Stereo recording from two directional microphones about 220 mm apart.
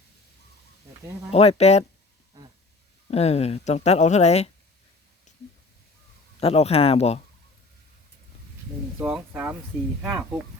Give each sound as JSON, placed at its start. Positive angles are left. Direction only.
{"t": 1.3, "sound": "speech", "side_deg": 30}
{"t": 3.1, "sound": "speech", "side_deg": 30}
{"t": 6.4, "sound": "speech", "side_deg": 25}
{"t": 9.0, "sound": "speech", "side_deg": -5}